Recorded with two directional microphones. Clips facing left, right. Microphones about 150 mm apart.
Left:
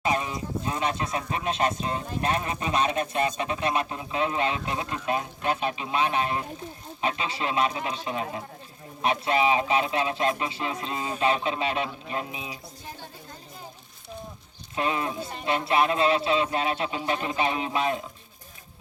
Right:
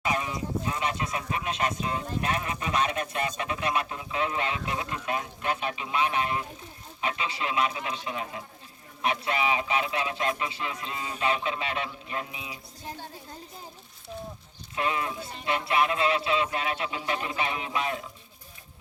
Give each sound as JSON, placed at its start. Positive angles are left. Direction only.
{"t": 0.0, "sound": "speech", "side_deg": 25}
{"t": 14.8, "sound": "speech", "side_deg": 25}